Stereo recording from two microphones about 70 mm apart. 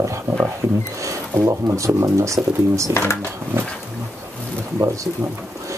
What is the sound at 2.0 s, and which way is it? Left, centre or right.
Speech, right.